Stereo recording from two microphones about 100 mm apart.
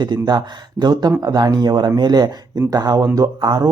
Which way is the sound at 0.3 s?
45° right (ahead or behind).